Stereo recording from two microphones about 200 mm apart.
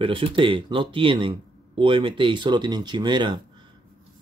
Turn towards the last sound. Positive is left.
turn(degrees=-20)  # may be behind; listen again after turning